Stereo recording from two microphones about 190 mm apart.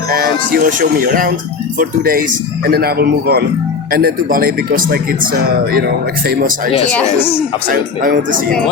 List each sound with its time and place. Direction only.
0.1 s a man's voice: 50° right (ahead or behind)
7.7 s speech: 45° right (ahead or behind)